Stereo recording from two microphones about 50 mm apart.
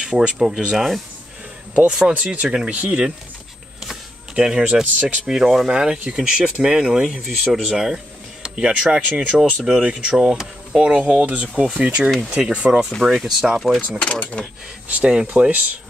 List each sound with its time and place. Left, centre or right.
0.0 s speech: centre
4.4 s speech: centre
10.8 s speech: right
13.1 s speech: centre
13.7 s speech: left
14.9 s speech: right
15.5 s speech: right